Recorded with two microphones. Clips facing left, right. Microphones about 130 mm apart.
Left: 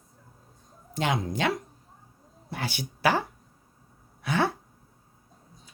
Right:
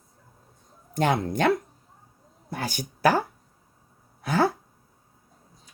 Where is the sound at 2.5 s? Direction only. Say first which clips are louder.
Right 2 dB; 45° right (ahead or behind).